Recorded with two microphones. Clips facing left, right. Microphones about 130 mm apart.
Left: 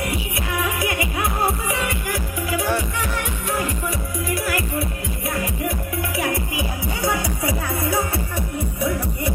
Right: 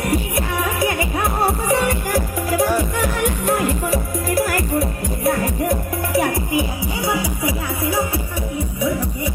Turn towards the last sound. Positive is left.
turn(degrees=0)  # may be behind; listen again after turning